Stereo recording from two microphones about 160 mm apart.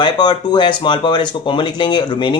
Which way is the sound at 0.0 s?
30° left (ahead or behind).